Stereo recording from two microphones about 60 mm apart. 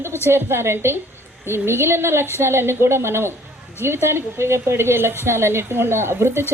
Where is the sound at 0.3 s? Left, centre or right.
Right.